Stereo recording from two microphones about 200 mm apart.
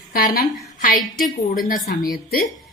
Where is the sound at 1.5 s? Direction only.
45° left (ahead or behind).